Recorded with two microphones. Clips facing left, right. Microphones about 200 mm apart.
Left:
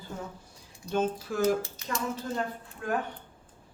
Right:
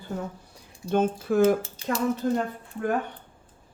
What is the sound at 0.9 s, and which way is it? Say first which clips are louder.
Speech: right 6 dB; 55° right (ahead or behind).